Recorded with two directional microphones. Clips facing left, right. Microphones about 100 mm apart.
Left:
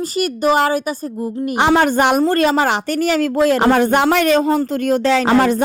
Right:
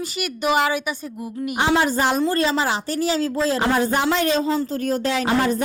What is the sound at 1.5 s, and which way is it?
A woman's voice, 65° left (ahead or behind).